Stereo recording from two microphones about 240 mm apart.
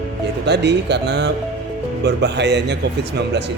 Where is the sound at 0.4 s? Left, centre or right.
Right.